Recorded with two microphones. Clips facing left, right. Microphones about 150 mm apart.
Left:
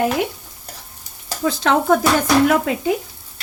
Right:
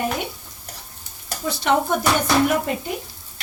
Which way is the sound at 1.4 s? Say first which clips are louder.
Left 3 dB; 90° left.